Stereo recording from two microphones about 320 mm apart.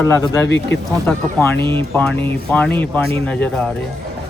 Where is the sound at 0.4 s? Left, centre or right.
Left.